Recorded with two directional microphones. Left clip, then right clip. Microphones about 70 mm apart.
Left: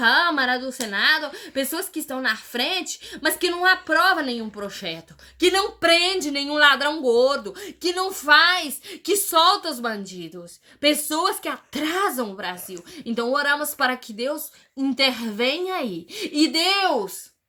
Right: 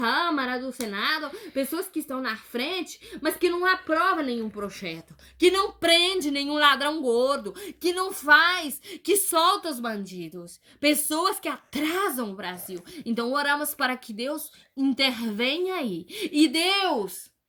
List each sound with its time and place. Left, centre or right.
0.0 s a woman's voice: left
8.2 s speech: left
8.9 s a woman's voice: left
9.9 s a woman's voice: centre
11.7 s a woman's voice: centre
11.9 s speech: centre
13.0 s speech: centre